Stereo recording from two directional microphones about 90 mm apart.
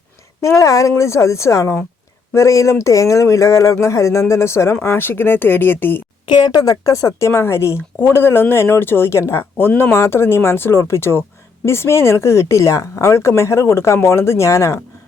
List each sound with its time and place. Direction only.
0.4 s speech: 40° left (ahead or behind)
6.2 s a woman's voice: 55° left (ahead or behind); by 14.8 s 35° left (ahead or behind)